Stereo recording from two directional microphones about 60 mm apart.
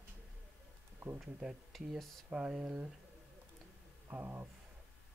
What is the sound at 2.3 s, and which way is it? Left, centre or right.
Speech, centre.